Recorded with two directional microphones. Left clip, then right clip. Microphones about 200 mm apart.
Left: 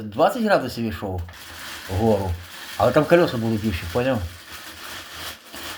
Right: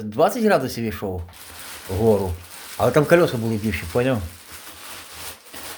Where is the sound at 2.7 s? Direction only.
30° right (ahead or behind).